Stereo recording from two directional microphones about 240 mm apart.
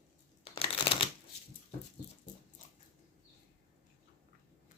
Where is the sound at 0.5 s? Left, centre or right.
Left.